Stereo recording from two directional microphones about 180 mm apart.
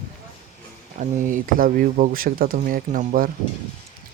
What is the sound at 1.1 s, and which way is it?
Speech, 45° right (ahead or behind).